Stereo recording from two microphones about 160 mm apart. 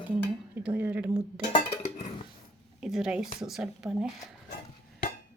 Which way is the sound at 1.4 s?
35° left (ahead or behind).